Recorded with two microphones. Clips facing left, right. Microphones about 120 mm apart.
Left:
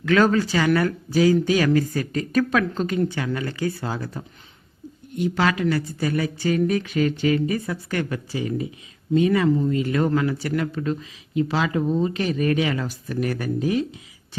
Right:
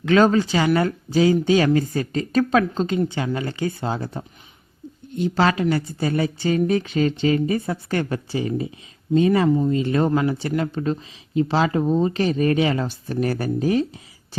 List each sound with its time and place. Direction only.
0.0 s speech: 25° right (ahead or behind)